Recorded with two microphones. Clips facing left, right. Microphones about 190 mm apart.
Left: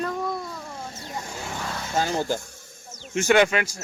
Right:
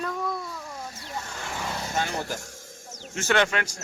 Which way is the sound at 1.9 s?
30° left (ahead or behind).